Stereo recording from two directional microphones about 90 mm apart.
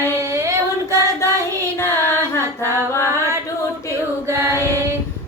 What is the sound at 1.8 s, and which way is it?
Music, 25° left (ahead or behind).